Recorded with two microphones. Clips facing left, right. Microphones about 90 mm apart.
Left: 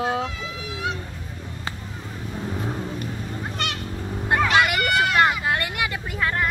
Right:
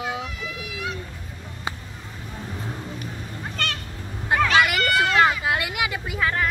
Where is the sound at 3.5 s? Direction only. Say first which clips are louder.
Right 2 dB; 15° left (ahead or behind).